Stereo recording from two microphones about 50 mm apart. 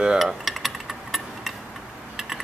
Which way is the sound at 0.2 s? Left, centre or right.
Centre.